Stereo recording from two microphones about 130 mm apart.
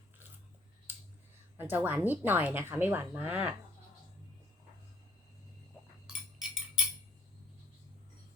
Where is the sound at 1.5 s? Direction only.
15° right (ahead or behind).